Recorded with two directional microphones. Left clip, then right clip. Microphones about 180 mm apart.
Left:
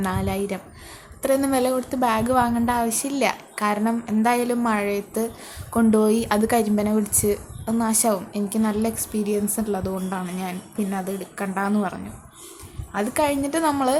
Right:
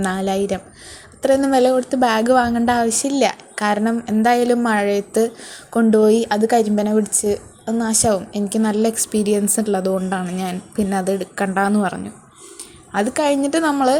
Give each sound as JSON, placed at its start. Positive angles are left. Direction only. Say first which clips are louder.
{"t": 0.0, "sound": "a woman's voice", "louder": "right 6 dB", "side_deg": -20}